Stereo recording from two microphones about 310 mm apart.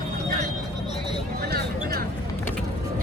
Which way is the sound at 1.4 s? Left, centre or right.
Right.